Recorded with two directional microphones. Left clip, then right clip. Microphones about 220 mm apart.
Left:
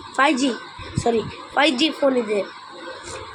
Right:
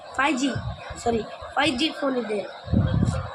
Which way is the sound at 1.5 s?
5° left (ahead or behind).